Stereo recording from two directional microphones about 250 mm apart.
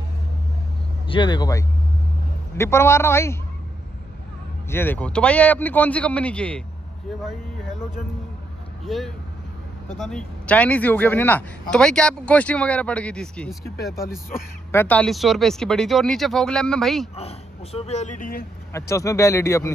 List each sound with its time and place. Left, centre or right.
1.0 s speech: centre
4.6 s speech: centre
8.8 s speech: centre
14.7 s speech: centre
17.1 s speech: left
18.7 s speech: centre